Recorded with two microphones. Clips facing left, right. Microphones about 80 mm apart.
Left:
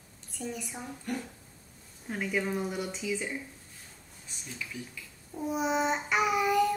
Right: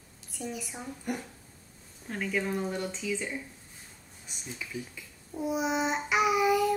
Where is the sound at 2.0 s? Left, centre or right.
Centre.